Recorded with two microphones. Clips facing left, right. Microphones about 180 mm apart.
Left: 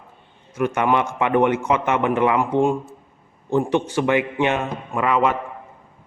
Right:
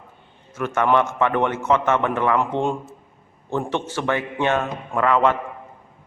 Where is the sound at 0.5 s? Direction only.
15° left (ahead or behind).